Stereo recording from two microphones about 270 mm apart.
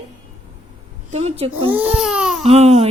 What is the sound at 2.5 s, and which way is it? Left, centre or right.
Speech, right.